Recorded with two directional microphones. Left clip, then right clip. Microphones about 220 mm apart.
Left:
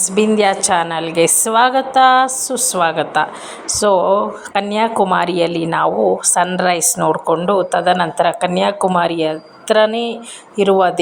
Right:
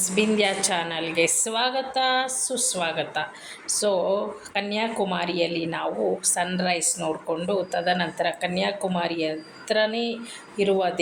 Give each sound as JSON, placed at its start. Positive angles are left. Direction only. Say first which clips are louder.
{"t": 0.0, "sound": "a woman's voice", "louder": "left 9 dB", "side_deg": 20}